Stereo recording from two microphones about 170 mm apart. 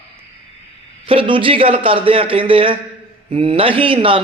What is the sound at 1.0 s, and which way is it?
Speech, 30° right (ahead or behind).